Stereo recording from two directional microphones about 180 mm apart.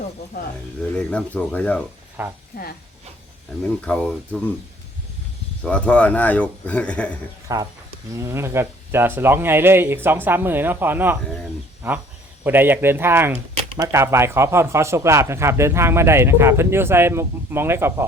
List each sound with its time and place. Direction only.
1.1 s a man's voice: 5° left (ahead or behind)
2.2 s speech: 10° right (ahead or behind)
2.5 s speech: 55° left (ahead or behind)
3.6 s a man's voice: 5° left (ahead or behind)
5.6 s a man's voice: 5° left (ahead or behind)
7.4 s speech: 20° right (ahead or behind)